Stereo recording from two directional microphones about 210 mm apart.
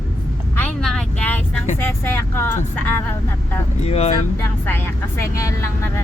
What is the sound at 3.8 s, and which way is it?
Speech, 30° left (ahead or behind).